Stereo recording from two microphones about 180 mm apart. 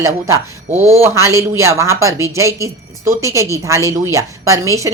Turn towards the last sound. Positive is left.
turn(degrees=-15)  # may be behind; listen again after turning